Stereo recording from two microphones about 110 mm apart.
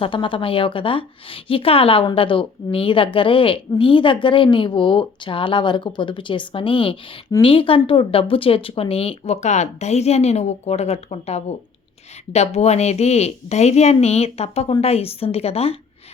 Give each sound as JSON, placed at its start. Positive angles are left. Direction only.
{"t": 0.0, "sound": "a woman's voice", "side_deg": 50}